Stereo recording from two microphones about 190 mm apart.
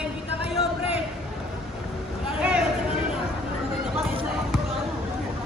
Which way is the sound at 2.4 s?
5° right (ahead or behind).